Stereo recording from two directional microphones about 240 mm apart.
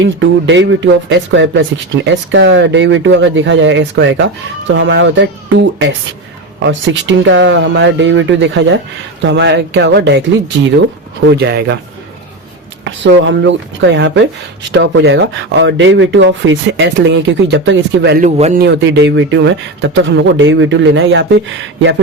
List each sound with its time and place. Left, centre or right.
0.0 s speech: right
12.8 s speech: right
18.2 s a man's voice: right
18.6 s speech: right